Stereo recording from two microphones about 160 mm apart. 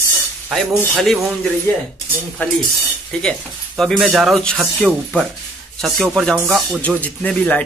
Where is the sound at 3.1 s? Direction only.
5° left (ahead or behind).